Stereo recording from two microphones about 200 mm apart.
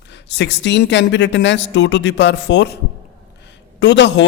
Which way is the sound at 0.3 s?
60° left (ahead or behind).